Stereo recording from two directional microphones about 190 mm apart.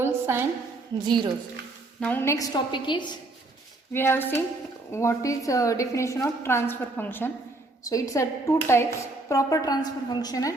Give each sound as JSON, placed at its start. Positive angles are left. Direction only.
{"t": 0.0, "sound": "a sound", "side_deg": -10}
{"t": 1.0, "sound": "a woman's voice", "side_deg": -25}
{"t": 2.0, "sound": "a woman's voice", "side_deg": 10}
{"t": 3.9, "sound": "a woman's voice", "side_deg": 10}